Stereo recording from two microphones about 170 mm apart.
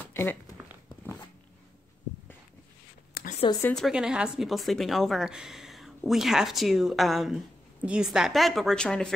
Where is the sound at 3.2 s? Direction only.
65° left (ahead or behind).